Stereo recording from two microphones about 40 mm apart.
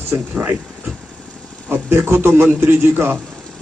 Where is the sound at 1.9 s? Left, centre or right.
Right.